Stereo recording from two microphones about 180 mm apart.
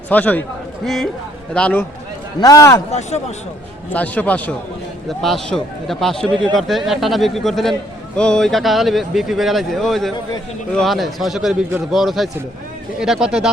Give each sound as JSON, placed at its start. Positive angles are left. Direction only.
{"t": 0.1, "sound": "a man's voice", "side_deg": 10}
{"t": 1.5, "sound": "a man's voice", "side_deg": 5}
{"t": 2.4, "sound": "a man's voice", "side_deg": 20}
{"t": 2.9, "sound": "a man's voice", "side_deg": 40}
{"t": 3.9, "sound": "a man's voice", "side_deg": 10}